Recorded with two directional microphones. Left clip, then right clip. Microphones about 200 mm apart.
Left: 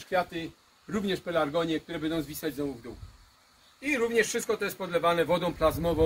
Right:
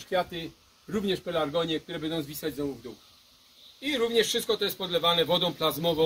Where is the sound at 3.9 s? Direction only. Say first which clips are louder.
Right 1 dB; 10° right (ahead or behind).